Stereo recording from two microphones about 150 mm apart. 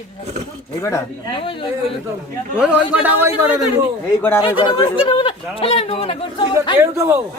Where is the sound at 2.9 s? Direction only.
10° right (ahead or behind).